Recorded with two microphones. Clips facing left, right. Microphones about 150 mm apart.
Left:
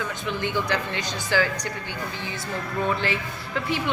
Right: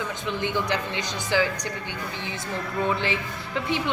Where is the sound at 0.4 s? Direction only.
20° right (ahead or behind).